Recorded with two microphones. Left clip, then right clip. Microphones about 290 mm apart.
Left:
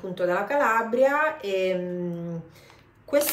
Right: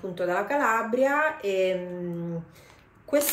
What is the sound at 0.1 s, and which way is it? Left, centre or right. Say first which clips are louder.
Speech: left 2 dB; centre.